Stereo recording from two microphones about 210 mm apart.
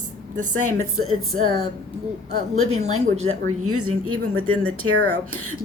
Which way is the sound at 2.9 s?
75° right (ahead or behind).